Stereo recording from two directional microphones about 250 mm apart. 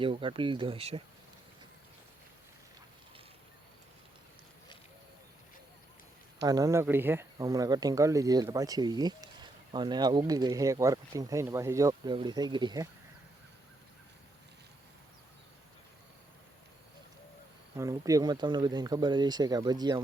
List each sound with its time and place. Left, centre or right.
0.0 s speech: centre
6.4 s speech: centre
17.7 s speech: centre